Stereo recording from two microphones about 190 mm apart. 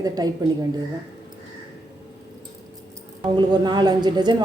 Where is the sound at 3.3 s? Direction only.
25° right (ahead or behind).